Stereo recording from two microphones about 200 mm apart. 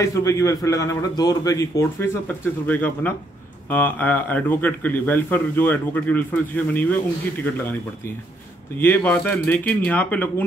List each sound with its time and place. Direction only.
0.0 s speech: 15° left (ahead or behind)
8.7 s speech: 10° left (ahead or behind)